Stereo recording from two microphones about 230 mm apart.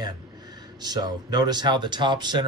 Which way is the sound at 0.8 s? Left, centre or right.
Centre.